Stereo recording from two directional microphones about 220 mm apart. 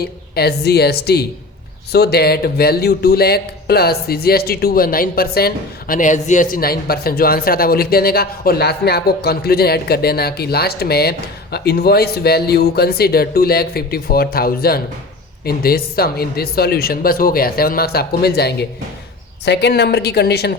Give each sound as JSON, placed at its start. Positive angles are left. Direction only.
{"t": 0.0, "sound": "speech", "side_deg": 45}